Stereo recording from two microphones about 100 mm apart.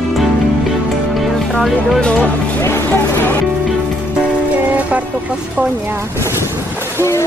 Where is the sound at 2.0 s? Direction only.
10° left (ahead or behind).